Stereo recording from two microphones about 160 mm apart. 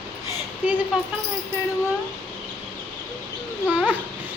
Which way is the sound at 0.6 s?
10° right (ahead or behind).